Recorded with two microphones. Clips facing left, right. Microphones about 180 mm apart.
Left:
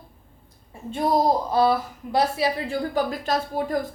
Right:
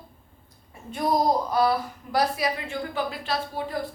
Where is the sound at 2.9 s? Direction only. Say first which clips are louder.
Left 4 dB; 45° left (ahead or behind).